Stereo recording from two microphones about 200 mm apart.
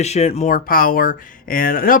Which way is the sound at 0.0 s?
30° left (ahead or behind).